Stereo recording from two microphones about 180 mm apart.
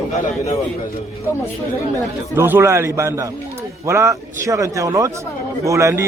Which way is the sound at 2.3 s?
15° right (ahead or behind).